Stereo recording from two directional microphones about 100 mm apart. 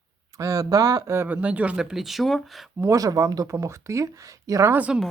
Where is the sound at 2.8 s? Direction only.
35° right (ahead or behind).